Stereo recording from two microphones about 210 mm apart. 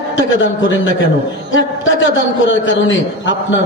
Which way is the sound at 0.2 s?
65° left (ahead or behind).